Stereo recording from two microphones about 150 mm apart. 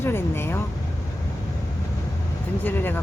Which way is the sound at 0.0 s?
15° left (ahead or behind).